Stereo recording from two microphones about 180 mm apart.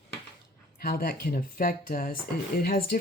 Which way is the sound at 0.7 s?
55° left (ahead or behind).